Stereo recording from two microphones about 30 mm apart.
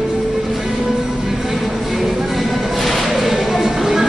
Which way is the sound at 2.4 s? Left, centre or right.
Centre.